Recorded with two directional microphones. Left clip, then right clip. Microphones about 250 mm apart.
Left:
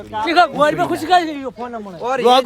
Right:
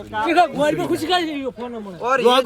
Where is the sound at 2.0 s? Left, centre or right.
Left.